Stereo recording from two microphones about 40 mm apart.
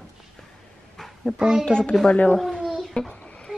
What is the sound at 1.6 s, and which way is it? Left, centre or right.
Speech, left.